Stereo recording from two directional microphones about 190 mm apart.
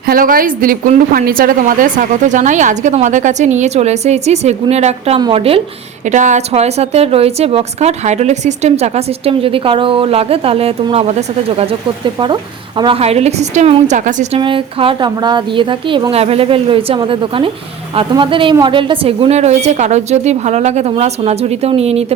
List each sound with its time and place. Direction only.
0.0 s a woman's voice: 50° right (ahead or behind)
14.3 s a woman's voice: 30° right (ahead or behind)